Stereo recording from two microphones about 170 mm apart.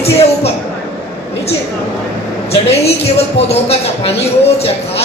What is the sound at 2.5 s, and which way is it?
A woman's voice, 35° left (ahead or behind).